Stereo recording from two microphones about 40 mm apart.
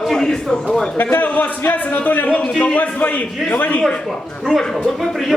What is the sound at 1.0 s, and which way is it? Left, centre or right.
Speech, left.